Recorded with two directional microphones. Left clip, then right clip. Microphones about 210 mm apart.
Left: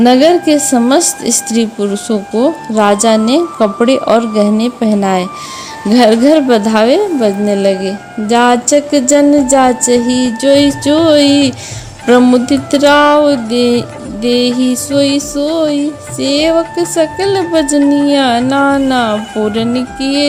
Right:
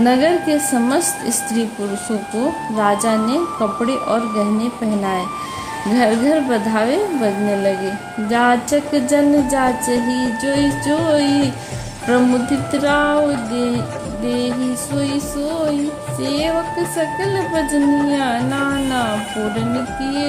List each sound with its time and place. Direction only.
0.0 s speech: 35° left (ahead or behind)